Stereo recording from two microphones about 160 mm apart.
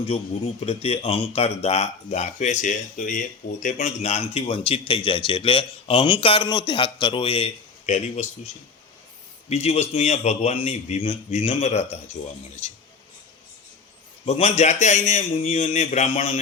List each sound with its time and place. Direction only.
0.6 s a man's voice: 40° left (ahead or behind)
9.5 s a man's voice: 40° left (ahead or behind)
14.3 s a man's voice: 40° left (ahead or behind)